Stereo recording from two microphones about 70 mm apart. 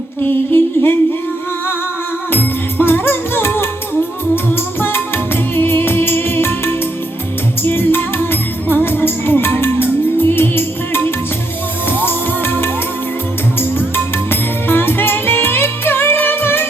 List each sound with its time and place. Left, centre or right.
0.2 s humming: left
2.3 s music: left